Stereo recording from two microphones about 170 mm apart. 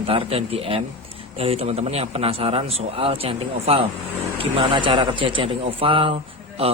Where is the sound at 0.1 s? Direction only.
35° right (ahead or behind).